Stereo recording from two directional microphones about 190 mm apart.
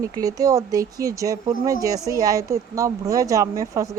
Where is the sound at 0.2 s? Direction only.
20° right (ahead or behind).